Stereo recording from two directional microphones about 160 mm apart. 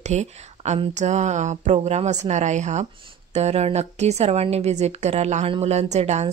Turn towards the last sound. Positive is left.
turn(degrees=-45)  # may be behind; listen again after turning